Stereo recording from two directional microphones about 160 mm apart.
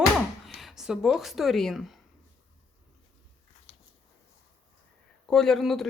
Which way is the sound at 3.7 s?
35° left (ahead or behind).